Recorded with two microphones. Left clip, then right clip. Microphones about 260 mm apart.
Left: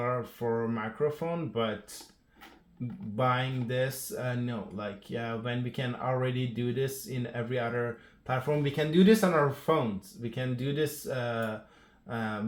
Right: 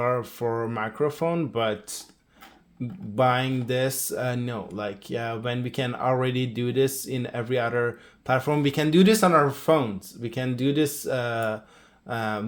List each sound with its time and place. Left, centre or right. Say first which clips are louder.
0.0 s speech: right 6 dB; right
3.2 s speech: right 7 dB; right